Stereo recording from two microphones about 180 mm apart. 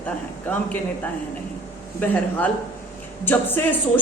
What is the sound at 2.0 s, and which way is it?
A woman's voice, 10° left (ahead or behind).